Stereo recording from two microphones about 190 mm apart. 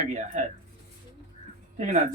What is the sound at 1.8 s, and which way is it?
Speech, 35° right (ahead or behind).